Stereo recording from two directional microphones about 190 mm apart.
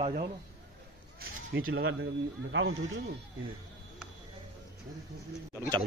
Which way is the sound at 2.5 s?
85° right.